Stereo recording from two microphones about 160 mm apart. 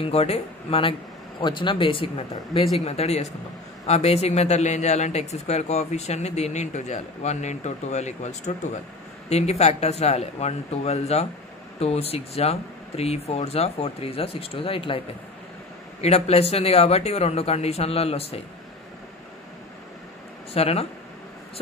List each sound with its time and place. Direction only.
0.0 s a man's voice: 40° left (ahead or behind)
16.0 s speech: 40° left (ahead or behind)
20.5 s speech: 40° left (ahead or behind)